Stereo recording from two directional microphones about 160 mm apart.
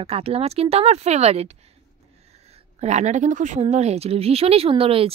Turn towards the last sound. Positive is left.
turn(degrees=-35)  # may be behind; listen again after turning